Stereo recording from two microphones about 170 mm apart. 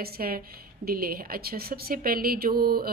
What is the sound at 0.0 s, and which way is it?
Speech, 60° right (ahead or behind).